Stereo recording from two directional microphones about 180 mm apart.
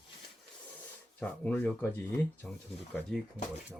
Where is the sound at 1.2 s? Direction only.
10° left (ahead or behind).